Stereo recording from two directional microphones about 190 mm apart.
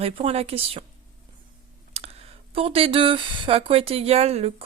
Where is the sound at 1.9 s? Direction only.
35° right (ahead or behind).